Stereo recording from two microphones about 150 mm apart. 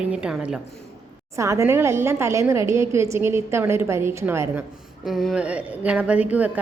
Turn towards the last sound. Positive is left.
turn(degrees=-10)  # may be behind; listen again after turning